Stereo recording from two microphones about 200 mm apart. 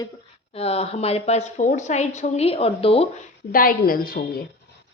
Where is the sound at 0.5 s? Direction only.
30° left (ahead or behind).